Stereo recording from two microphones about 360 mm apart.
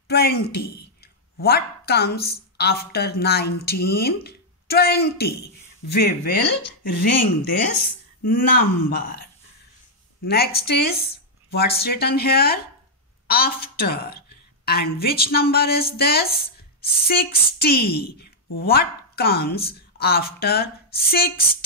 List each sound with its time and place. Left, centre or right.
0.1 s a woman's voice: left
10.2 s a woman's voice: left